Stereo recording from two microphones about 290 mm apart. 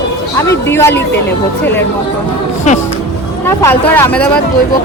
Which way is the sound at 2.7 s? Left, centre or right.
Left.